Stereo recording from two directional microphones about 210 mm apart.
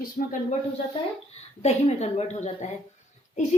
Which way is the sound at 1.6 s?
30° left (ahead or behind).